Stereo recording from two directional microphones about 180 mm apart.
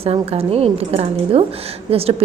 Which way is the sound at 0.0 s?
35° right (ahead or behind).